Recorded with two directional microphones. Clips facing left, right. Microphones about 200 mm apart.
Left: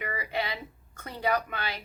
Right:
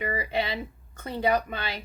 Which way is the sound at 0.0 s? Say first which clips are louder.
Right 4 dB; 25° right (ahead or behind).